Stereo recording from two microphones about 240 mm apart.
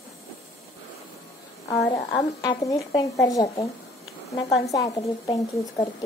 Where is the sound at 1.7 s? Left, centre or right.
Centre.